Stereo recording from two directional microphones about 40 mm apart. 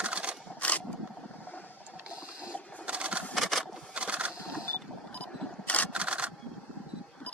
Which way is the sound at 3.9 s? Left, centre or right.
Right.